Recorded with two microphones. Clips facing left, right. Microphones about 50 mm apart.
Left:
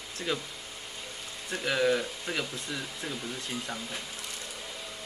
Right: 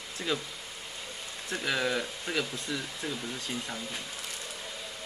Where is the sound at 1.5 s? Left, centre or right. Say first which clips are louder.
Left 3 dB; centre.